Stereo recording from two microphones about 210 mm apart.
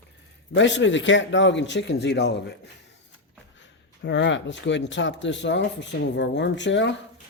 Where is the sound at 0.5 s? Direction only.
60° left (ahead or behind).